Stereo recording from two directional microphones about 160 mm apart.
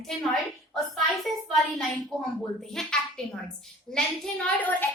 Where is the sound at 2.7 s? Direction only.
5° left (ahead or behind).